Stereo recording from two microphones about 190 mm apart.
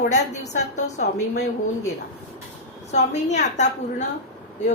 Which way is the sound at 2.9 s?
35° left (ahead or behind).